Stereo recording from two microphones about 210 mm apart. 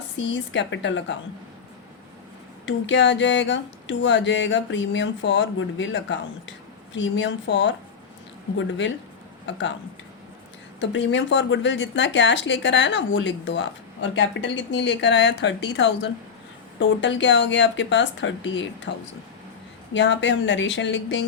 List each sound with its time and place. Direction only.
0.2 s speech: 60° left (ahead or behind)
2.6 s speech: 60° left (ahead or behind)
9.5 s speech: 60° left (ahead or behind)
10.8 s speech: 60° left (ahead or behind)
19.9 s speech: 60° left (ahead or behind)